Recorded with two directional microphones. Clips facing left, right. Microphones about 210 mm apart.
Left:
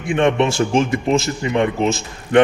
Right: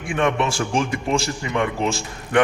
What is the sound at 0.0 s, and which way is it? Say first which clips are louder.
A man's voice: left 5 dB; 25° left (ahead or behind).